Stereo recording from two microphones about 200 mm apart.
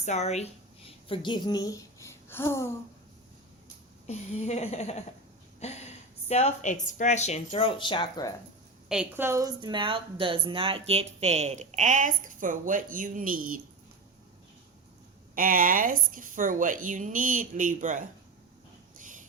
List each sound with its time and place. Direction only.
0.0 s a woman's voice: 35° left (ahead or behind); by 2.7 s 15° left (ahead or behind)
4.0 s a woman's voice: 35° left (ahead or behind)
5.5 s a sound: 35° left (ahead or behind)
6.2 s a woman's voice: 35° left (ahead or behind)
8.9 s a woman's voice: 5° right (ahead or behind); by 13.6 s 45° right (ahead or behind)
15.4 s speech: 45° right (ahead or behind)
18.9 s a sound: 40° right (ahead or behind)